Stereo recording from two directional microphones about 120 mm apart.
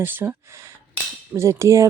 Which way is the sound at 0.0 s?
20° right (ahead or behind).